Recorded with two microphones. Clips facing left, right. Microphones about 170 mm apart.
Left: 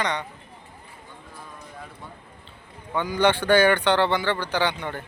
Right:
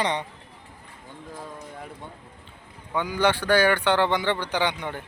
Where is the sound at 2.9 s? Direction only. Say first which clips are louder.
Left 2 dB; 10° right (ahead or behind).